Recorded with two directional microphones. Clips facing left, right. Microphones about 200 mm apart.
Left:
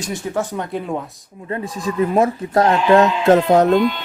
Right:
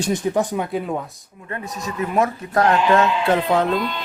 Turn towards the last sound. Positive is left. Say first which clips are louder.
# left 6 dB
turn(degrees=45)  # may be behind; listen again after turning